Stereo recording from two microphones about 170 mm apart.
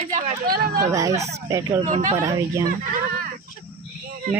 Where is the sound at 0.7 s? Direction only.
20° right (ahead or behind).